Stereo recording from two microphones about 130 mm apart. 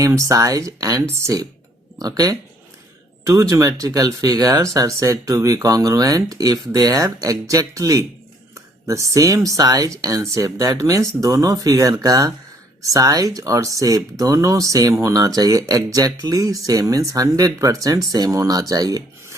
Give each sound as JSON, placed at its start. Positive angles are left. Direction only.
{"t": 0.0, "sound": "speech", "side_deg": -25}